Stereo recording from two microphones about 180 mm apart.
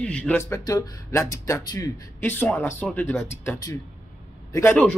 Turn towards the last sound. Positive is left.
turn(degrees=10)  # may be behind; listen again after turning